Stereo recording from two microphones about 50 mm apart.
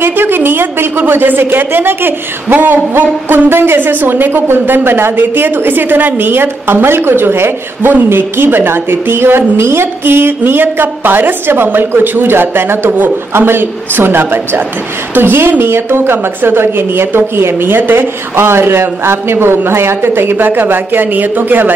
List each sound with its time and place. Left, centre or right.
0.0 s a woman's voice: right